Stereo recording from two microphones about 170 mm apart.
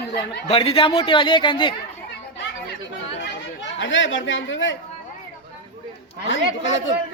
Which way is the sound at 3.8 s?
90° left.